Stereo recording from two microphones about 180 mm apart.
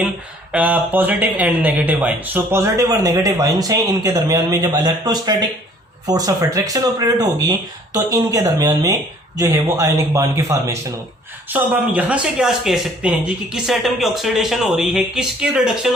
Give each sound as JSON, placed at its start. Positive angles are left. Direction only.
{"t": 0.5, "sound": "speech", "side_deg": -10}